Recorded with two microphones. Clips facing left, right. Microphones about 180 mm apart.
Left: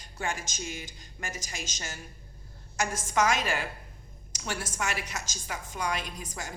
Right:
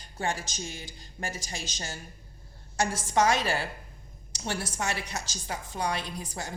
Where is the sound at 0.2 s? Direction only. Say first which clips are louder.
Right 2 dB; 35° right (ahead or behind).